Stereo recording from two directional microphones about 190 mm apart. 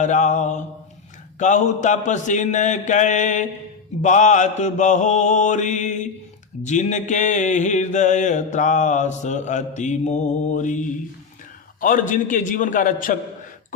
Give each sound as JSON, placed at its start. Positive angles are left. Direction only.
{"t": 0.0, "sound": "mantra", "side_deg": 40}
{"t": 11.8, "sound": "a man's voice", "side_deg": 45}